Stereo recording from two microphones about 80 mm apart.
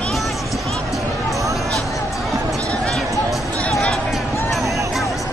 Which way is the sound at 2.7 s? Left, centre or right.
Centre.